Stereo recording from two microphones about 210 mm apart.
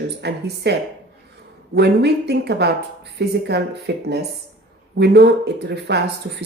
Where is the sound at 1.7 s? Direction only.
50° right (ahead or behind).